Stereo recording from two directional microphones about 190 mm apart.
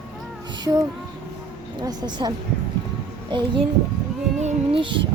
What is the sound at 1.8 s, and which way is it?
Speech, 20° right (ahead or behind).